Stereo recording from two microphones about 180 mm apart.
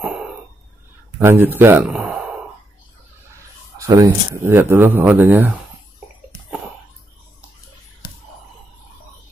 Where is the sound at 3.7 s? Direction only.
20° right (ahead or behind).